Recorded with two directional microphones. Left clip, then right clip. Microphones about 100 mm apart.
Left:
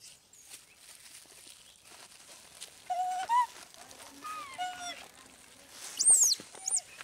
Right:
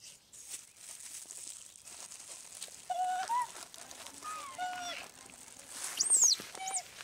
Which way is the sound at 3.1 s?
40° right (ahead or behind).